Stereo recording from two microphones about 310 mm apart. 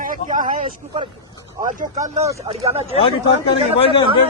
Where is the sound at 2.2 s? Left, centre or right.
Centre.